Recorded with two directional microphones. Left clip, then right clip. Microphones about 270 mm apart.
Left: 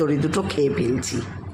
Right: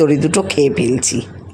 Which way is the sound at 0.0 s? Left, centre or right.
Right.